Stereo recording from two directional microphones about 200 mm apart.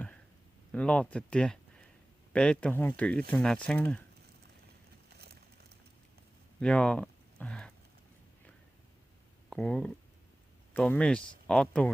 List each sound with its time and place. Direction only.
0.7 s speech: 5° left (ahead or behind)
5.0 s horse: 50° right (ahead or behind)
6.6 s a sound: 5° left (ahead or behind)
9.5 s speech: 5° left (ahead or behind)